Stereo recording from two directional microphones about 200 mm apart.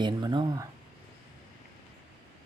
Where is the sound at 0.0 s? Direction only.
20° right (ahead or behind).